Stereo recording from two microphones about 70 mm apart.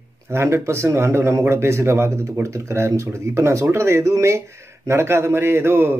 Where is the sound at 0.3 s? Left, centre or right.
Right.